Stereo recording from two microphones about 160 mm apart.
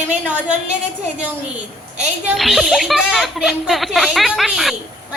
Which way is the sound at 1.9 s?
5° right (ahead or behind).